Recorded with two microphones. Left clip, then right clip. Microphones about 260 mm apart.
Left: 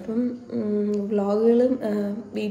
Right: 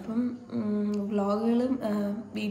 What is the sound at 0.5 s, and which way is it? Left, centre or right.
Speech, centre.